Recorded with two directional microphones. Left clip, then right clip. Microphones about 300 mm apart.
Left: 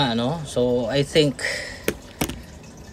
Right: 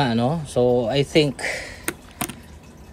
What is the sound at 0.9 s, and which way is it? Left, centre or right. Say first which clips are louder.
Speech: even; centre.